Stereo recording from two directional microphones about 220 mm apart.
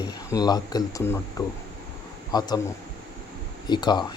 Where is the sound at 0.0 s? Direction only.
20° left (ahead or behind).